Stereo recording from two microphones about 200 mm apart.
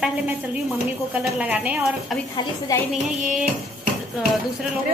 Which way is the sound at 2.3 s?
20° left (ahead or behind).